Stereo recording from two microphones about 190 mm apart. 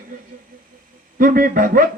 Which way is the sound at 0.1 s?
45° right (ahead or behind).